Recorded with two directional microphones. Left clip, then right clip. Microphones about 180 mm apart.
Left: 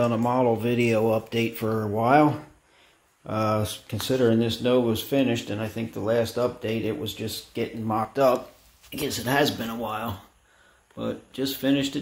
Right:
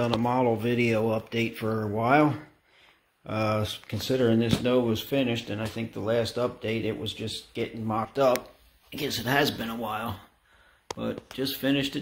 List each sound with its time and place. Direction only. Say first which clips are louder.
0.0 s speech: left 3 dB; centre (ahead or behind)